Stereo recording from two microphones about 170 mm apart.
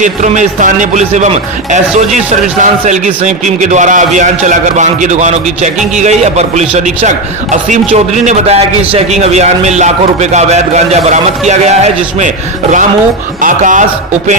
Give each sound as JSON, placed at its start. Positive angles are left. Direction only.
{"t": 0.0, "sound": "a man's voice", "side_deg": -45}
{"t": 13.4, "sound": "speech", "side_deg": -50}